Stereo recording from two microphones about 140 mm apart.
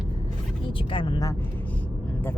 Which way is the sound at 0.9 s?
35° left (ahead or behind).